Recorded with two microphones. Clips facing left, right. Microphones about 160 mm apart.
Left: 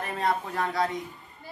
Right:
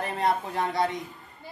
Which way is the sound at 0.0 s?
30° right (ahead or behind).